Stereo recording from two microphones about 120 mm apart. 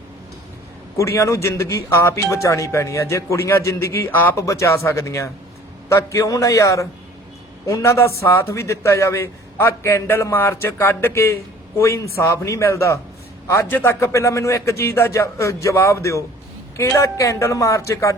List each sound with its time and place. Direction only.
0.9 s a man's voice: 25° left (ahead or behind)